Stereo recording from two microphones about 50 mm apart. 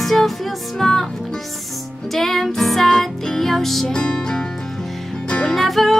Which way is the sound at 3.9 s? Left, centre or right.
Centre.